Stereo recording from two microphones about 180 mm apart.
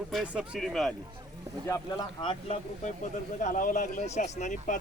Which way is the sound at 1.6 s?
20° left (ahead or behind).